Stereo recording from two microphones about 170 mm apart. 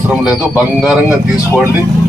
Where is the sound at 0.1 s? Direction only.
5° right (ahead or behind).